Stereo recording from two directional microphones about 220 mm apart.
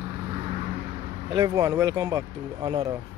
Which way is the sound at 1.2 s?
20° right (ahead or behind).